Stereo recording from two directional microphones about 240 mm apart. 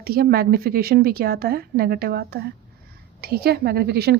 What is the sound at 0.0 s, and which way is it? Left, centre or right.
Speech, right.